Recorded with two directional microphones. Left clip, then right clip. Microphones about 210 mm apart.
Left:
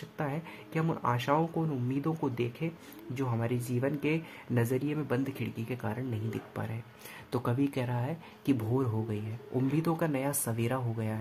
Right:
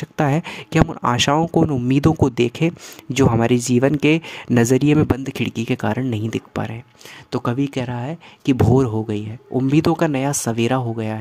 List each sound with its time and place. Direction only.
0.2 s speech: 50° right (ahead or behind)